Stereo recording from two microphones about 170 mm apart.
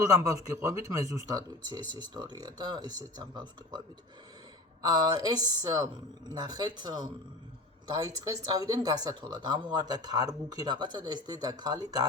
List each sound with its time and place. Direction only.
0.0 s speech: 20° right (ahead or behind)
4.8 s speech: 25° right (ahead or behind)